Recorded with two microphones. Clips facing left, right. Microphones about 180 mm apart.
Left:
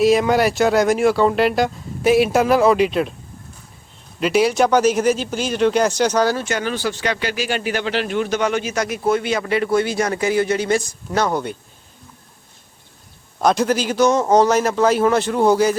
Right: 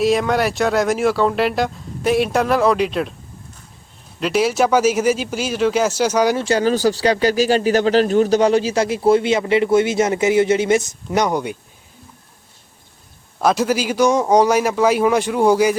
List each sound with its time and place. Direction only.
0.0 s speech: centre (ahead or behind)
4.2 s a man's voice: centre (ahead or behind)
6.3 s speech: 30° right (ahead or behind); by 11.5 s 15° right (ahead or behind)
13.4 s a man's voice: 5° right (ahead or behind)